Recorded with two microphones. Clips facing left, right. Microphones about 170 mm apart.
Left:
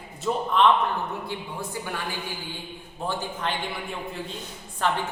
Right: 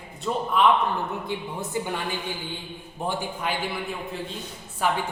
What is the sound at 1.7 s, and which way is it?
Speech, 20° right (ahead or behind).